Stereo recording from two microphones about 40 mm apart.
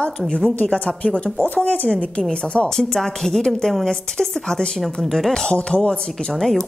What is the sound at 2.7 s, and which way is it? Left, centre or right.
A woman's voice, centre.